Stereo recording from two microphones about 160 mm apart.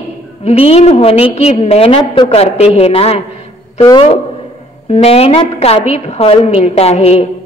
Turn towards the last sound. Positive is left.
turn(degrees=40)  # may be behind; listen again after turning